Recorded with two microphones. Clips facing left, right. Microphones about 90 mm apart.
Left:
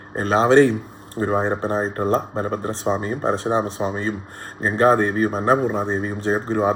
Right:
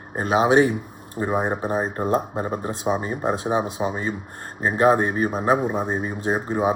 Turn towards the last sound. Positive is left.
turn(degrees=-15)  # may be behind; listen again after turning